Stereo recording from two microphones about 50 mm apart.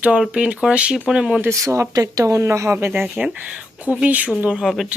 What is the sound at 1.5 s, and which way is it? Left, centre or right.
Speech, right.